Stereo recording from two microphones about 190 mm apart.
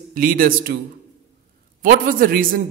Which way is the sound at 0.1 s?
50° right (ahead or behind).